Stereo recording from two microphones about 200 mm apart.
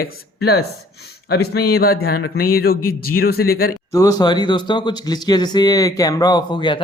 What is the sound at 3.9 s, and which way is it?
Speech, 20° left (ahead or behind).